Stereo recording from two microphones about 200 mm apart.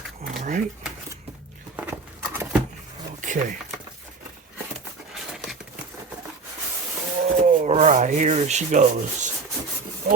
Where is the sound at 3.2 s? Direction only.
40° right (ahead or behind).